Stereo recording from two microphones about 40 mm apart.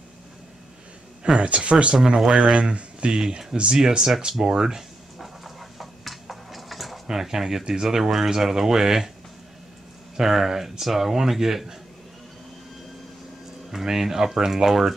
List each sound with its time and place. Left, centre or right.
1.4 s speech: right
2.0 s speech: centre
2.5 s speech: right
4.2 s a sound: centre
7.1 s speech: centre
10.1 s speech: centre
13.7 s speech: centre